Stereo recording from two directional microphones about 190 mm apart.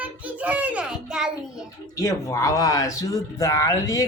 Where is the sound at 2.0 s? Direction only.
15° left (ahead or behind).